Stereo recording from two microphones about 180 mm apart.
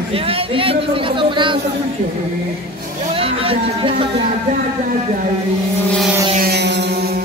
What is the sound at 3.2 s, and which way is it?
Speech, 30° right (ahead or behind).